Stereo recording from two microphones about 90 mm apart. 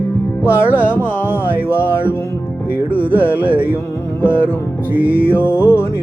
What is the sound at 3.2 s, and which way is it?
Carnatic music, 20° right (ahead or behind).